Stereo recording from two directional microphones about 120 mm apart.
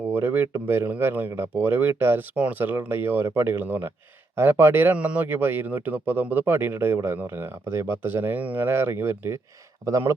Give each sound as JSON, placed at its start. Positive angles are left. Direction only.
{"t": 0.1, "sound": "speech", "side_deg": -15}